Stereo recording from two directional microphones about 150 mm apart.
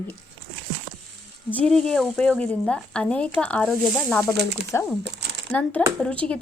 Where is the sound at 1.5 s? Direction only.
5° left (ahead or behind).